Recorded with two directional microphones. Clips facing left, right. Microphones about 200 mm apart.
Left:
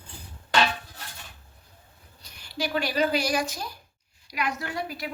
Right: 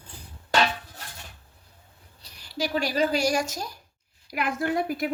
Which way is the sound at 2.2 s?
35° right (ahead or behind).